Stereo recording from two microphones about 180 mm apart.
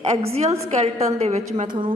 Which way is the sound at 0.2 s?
35° right (ahead or behind).